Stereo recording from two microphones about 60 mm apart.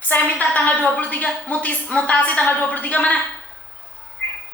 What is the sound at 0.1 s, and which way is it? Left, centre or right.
A woman's voice, left.